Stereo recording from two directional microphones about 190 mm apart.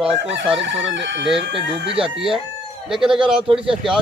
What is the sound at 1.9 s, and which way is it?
Speech, 30° right (ahead or behind).